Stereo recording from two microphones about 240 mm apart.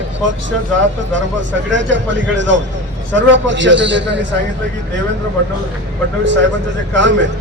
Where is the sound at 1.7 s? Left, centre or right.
Right.